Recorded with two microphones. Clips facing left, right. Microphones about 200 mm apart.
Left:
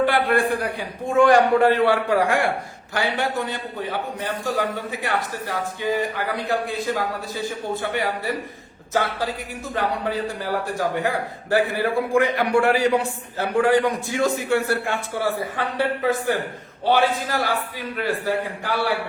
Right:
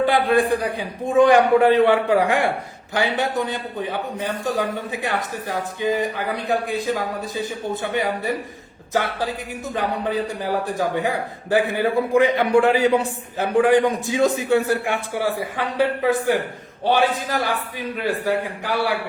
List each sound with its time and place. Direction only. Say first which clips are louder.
0.0 s a man's voice: right 2 dB; 20° right (ahead or behind)